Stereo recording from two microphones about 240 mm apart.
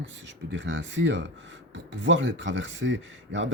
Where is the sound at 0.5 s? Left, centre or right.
Right.